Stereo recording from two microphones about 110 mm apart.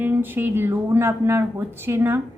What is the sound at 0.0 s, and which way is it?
Speech, 20° right (ahead or behind).